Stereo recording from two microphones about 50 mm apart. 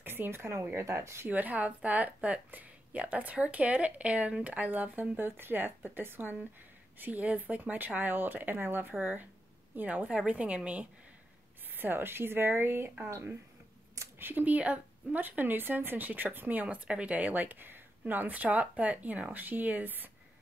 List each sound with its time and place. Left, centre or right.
0.0 s speech: right
0.7 s speech: right
1.3 s speech: right
7.0 s speech: right
10.0 s speech: right
11.7 s speech: right
14.1 s speech: right